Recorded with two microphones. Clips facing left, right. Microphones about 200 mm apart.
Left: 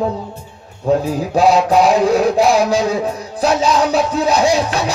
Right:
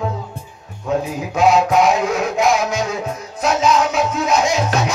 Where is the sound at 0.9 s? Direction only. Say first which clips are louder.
Left 5 dB; 35° left (ahead or behind).